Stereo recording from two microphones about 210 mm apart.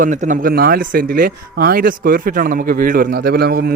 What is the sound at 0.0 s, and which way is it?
A man's voice, 35° right (ahead or behind).